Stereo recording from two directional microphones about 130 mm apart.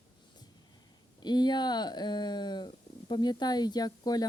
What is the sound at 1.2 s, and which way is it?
Speech, 35° left (ahead or behind).